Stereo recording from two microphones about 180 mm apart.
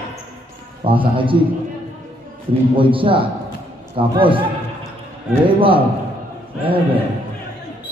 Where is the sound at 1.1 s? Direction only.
30° right (ahead or behind).